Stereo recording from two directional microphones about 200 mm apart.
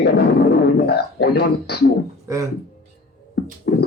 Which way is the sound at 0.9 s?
55° left (ahead or behind).